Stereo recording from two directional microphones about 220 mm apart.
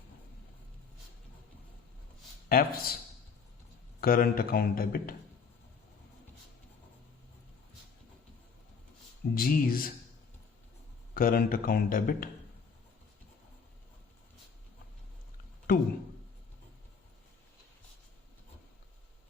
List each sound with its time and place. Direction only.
2.5 s speech: 40° left (ahead or behind)
4.0 s speech: 40° left (ahead or behind)
9.3 s speech: 40° left (ahead or behind)
11.1 s speech: 40° left (ahead or behind)
15.7 s a sound: 40° left (ahead or behind)